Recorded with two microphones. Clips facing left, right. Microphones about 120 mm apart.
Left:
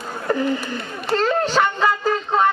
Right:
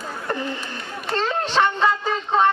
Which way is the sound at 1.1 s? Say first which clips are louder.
Left 4 dB; centre (ahead or behind).